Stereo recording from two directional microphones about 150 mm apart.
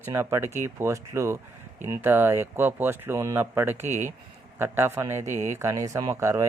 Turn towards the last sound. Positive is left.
turn(degrees=-20)  # may be behind; listen again after turning